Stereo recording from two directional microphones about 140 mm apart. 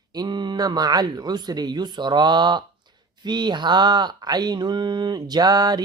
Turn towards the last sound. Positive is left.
turn(degrees=-30)  # may be behind; listen again after turning